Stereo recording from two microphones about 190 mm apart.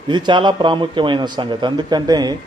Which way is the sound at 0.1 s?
25° right (ahead or behind).